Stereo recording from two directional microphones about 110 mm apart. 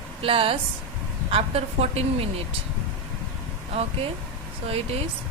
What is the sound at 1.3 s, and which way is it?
Speech, 70° right (ahead or behind).